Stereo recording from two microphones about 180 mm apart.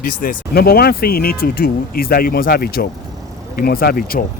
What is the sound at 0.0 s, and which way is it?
Speech, 55° left (ahead or behind).